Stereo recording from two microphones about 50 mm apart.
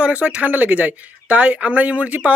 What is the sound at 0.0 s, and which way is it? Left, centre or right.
Speech, right.